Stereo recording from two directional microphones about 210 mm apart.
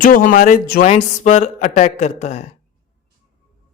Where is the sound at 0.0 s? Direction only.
40° left (ahead or behind).